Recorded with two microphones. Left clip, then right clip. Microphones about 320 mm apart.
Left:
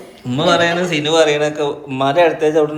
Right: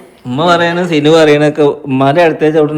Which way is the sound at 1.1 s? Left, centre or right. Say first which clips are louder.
Right 7 dB; right.